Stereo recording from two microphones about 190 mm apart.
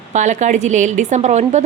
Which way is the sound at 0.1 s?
40° right (ahead or behind).